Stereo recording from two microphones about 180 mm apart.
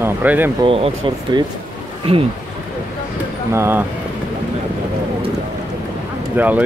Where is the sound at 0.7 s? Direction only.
30° right (ahead or behind).